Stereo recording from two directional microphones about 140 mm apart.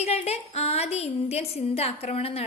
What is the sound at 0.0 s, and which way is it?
A woman's voice, 50° left (ahead or behind).